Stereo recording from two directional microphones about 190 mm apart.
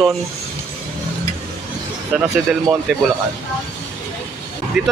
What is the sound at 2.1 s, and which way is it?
Speech, 5° right (ahead or behind).